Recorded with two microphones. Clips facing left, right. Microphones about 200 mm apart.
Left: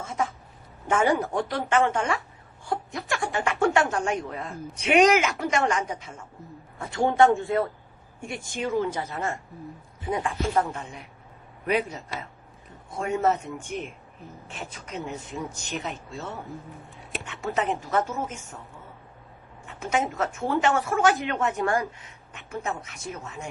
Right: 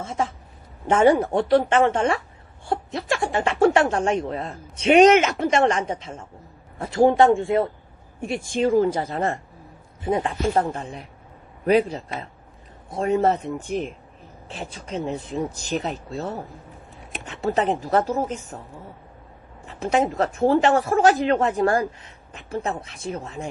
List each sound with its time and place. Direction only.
0.0 s a sound: 30° right (ahead or behind)
0.9 s speech: 25° right (ahead or behind)
8.6 s speech: 50° right (ahead or behind)
9.1 s speech: 35° right (ahead or behind)
10.5 s speech: 35° right (ahead or behind)
19.6 s speech: 35° right (ahead or behind)